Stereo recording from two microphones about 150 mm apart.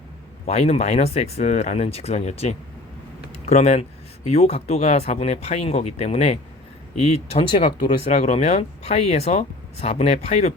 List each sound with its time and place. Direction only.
0.4 s speech: 45° left (ahead or behind)
8.0 s speech: 45° left (ahead or behind)